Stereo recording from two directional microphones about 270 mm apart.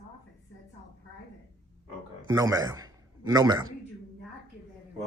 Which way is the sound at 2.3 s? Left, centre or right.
Centre.